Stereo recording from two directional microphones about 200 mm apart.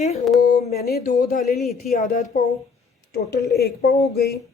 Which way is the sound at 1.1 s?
40° left (ahead or behind).